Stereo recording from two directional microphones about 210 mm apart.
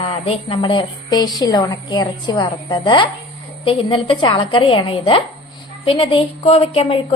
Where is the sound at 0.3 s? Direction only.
25° left (ahead or behind).